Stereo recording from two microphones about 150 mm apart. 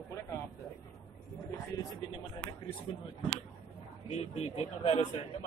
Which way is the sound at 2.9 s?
40° left (ahead or behind).